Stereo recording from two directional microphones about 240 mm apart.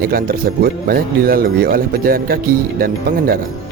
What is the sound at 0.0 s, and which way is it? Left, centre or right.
Speech, right.